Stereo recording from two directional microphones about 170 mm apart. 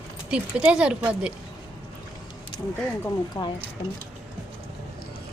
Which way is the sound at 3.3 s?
25° left (ahead or behind).